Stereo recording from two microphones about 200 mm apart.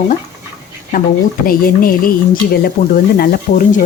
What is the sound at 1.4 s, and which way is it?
Speech, 45° left (ahead or behind).